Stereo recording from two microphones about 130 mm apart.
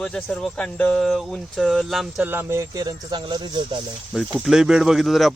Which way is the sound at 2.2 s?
15° right (ahead or behind).